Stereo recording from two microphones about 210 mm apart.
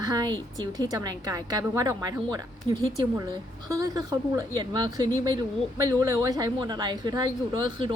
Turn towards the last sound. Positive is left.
turn(degrees=-20)  # may be behind; listen again after turning